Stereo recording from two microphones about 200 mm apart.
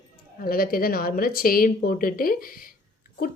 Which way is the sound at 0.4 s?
45° left (ahead or behind).